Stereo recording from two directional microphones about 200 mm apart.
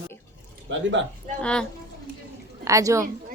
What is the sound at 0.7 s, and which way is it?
Speech, 70° right (ahead or behind).